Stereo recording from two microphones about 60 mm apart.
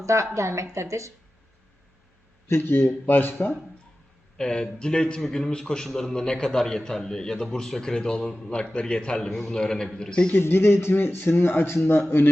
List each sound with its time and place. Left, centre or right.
0.0 s a woman's voice: right
2.5 s a man's voice: left
4.4 s a man's voice: centre
10.3 s a man's voice: left